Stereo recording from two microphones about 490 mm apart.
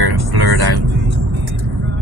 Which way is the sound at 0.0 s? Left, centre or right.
Right.